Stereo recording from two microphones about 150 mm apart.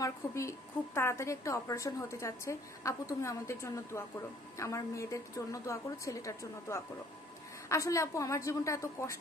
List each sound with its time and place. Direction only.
0.0 s a woman's voice: 20° left (ahead or behind)